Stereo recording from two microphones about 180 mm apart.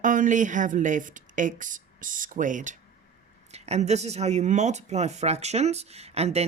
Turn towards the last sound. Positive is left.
turn(degrees=-35)  # may be behind; listen again after turning